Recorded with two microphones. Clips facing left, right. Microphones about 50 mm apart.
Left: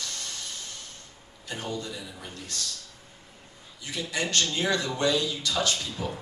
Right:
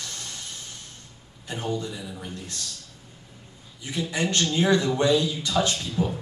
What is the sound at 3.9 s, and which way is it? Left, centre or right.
A man's voice, right.